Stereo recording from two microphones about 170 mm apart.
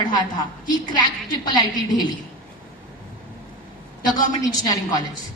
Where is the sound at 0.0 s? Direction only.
25° left (ahead or behind).